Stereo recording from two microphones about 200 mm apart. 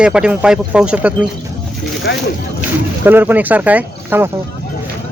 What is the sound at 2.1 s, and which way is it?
Speech, 55° left (ahead or behind).